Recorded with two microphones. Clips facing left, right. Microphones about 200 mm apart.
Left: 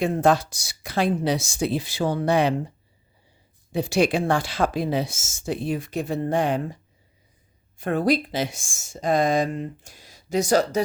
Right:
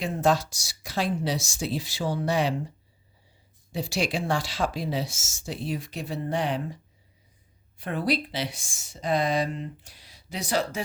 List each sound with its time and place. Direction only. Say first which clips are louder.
0.0 s speech: left 4 dB; 55° left (ahead or behind)
3.7 s speech: left 7 dB; 55° left (ahead or behind)
7.8 s speech: left 6 dB; 45° left (ahead or behind)